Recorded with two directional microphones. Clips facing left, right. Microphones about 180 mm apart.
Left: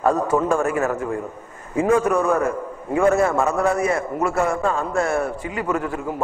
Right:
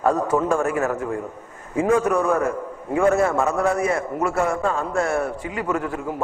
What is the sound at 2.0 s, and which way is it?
A man's voice, 25° left (ahead or behind).